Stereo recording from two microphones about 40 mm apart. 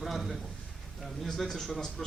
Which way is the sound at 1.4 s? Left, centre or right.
Centre.